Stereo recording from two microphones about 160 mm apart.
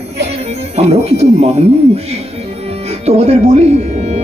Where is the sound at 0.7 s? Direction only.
40° right (ahead or behind).